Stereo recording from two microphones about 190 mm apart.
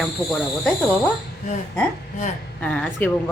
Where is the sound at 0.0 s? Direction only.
Centre (ahead or behind).